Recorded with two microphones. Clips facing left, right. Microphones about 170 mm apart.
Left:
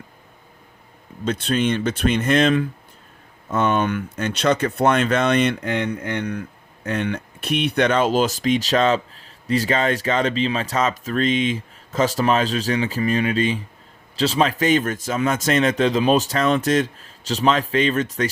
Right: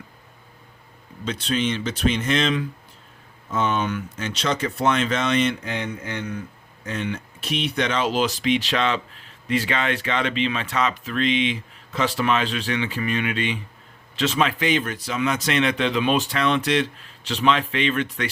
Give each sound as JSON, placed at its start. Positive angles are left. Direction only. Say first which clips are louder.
{"t": 1.2, "sound": "speech", "louder": "left 3 dB", "side_deg": 50}